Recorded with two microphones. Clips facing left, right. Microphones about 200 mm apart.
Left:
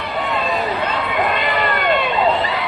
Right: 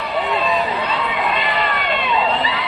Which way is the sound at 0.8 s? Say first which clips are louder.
Left 2 dB; 50° left (ahead or behind).